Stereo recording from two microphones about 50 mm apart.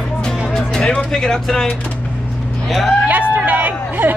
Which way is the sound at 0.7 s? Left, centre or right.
Centre.